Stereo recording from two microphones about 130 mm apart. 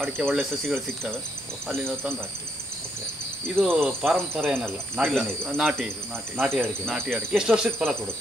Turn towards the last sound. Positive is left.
turn(degrees=-5)  # may be behind; listen again after turning